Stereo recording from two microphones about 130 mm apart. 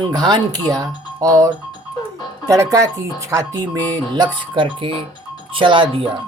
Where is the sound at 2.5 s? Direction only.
25° right (ahead or behind).